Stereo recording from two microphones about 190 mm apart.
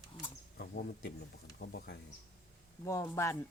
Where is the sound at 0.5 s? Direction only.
55° left (ahead or behind).